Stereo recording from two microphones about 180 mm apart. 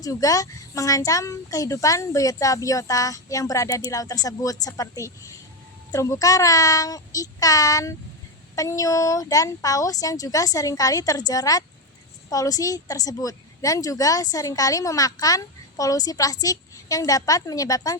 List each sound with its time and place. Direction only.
0.0 s a woman's voice: 20° left (ahead or behind)